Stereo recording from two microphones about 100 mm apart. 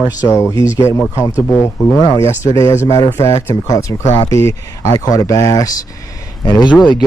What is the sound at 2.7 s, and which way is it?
Speech, 35° left (ahead or behind).